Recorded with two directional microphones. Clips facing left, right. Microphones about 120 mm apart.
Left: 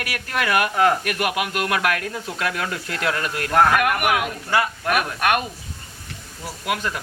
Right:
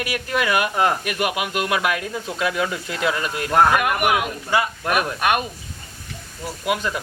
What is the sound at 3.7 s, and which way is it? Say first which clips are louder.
Speech: even; 25° right (ahead or behind).